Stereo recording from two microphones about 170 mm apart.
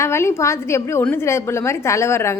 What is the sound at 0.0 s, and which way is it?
A woman's voice, 15° left (ahead or behind).